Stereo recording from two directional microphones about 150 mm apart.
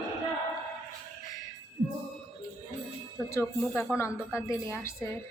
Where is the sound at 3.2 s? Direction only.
20° left (ahead or behind).